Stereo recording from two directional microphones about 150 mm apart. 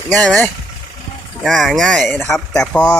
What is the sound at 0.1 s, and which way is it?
Speech, 5° left (ahead or behind).